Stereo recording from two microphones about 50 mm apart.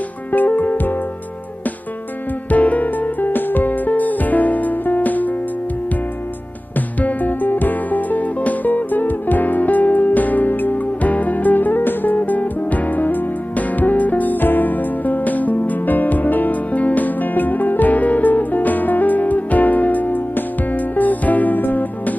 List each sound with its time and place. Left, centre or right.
0.3 s music: left
2.5 s music: left
7.0 s music: left